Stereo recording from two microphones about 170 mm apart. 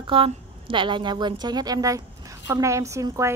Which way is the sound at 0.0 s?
30° right (ahead or behind).